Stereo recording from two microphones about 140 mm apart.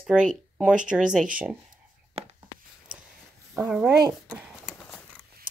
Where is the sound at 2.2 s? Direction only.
45° right (ahead or behind).